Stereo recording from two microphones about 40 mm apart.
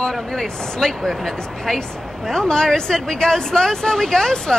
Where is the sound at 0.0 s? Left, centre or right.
Centre.